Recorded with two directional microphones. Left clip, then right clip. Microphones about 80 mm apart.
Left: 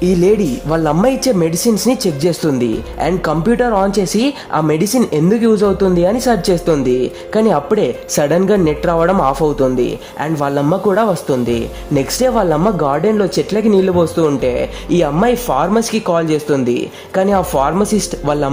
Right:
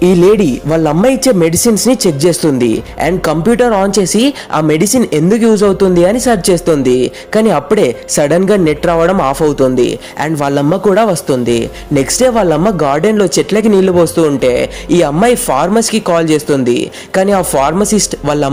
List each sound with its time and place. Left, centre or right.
0.0 s speech: right